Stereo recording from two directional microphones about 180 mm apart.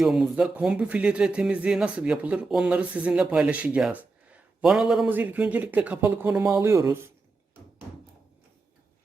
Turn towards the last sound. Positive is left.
turn(degrees=-15)  # may be behind; listen again after turning